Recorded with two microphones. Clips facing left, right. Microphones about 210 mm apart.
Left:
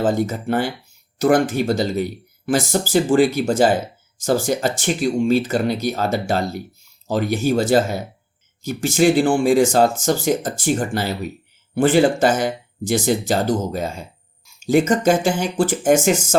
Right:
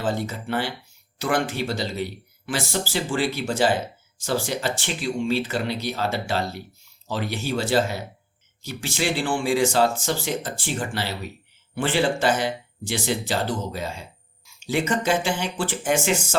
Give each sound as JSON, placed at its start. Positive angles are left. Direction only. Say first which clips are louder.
{"t": 0.0, "sound": "speech", "louder": "left 7 dB", "side_deg": 45}